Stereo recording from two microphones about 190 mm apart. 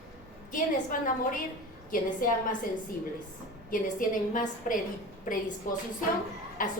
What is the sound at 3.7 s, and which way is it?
A woman's voice, 45° left (ahead or behind).